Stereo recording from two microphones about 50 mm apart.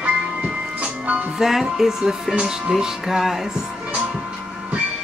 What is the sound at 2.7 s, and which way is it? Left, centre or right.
Speech, centre.